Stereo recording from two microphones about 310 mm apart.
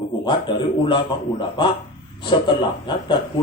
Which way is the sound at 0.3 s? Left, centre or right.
Centre.